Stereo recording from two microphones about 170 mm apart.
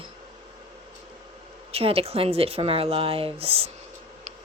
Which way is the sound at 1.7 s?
35° right (ahead or behind).